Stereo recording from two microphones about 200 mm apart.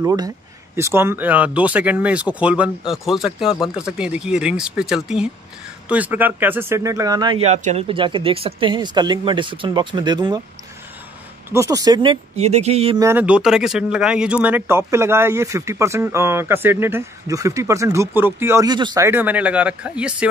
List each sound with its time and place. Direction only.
0.0 s speech: 20° right (ahead or behind)
11.5 s speech: 15° right (ahead or behind)
13.0 s speech: 10° right (ahead or behind)